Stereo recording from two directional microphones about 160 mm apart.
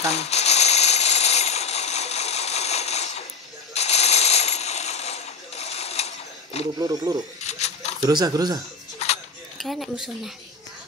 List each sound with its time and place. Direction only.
0.1 s rattle: 40° left (ahead or behind)
3.7 s coin: 40° left (ahead or behind)
6.8 s speech: 20° right (ahead or behind)
7.4 s mechanisms: 45° left (ahead or behind)
8.0 s speech: 25° right (ahead or behind)
9.0 s cutlery: 40° left (ahead or behind)
9.6 s speech: centre (ahead or behind)